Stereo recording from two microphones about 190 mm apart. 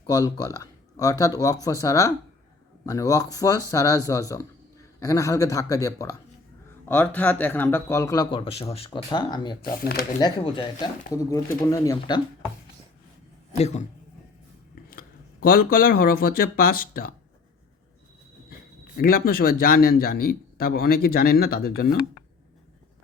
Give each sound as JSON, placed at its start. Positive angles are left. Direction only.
{"t": 0.1, "sound": "a man's voice", "side_deg": 20}
{"t": 9.7, "sound": "speech", "side_deg": 50}
{"t": 10.2, "sound": "a man's voice", "side_deg": 25}
{"t": 13.6, "sound": "speech", "side_deg": 35}
{"t": 14.8, "sound": "speech", "side_deg": 50}
{"t": 18.9, "sound": "speech", "side_deg": 50}